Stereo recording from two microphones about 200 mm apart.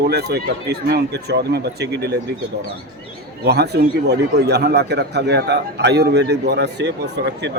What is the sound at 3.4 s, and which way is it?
A man's voice, 55° right (ahead or behind).